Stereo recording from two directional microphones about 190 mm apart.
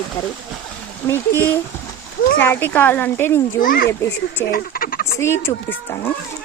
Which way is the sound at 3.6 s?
50° left (ahead or behind).